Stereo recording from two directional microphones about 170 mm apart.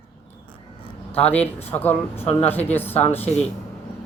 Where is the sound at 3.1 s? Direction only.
40° left (ahead or behind).